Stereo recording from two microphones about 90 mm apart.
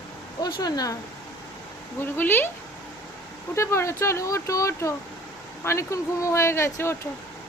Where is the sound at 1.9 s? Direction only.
25° left (ahead or behind).